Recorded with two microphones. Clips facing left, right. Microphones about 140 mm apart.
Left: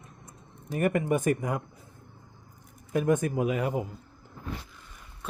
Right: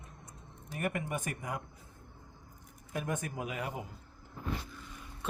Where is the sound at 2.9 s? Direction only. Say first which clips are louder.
Left 11 dB; 55° left (ahead or behind).